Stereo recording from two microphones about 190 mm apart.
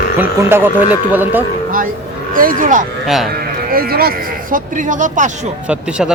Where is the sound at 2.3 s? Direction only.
45° right (ahead or behind).